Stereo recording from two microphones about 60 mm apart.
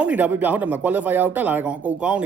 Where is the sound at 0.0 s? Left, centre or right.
Right.